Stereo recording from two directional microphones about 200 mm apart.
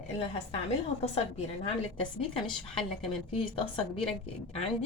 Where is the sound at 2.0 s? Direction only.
25° left (ahead or behind).